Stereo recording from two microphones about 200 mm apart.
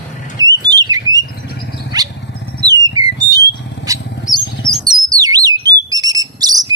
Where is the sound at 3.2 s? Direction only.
15° right (ahead or behind).